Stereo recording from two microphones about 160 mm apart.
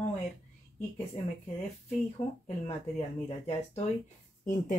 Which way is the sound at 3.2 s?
40° left (ahead or behind).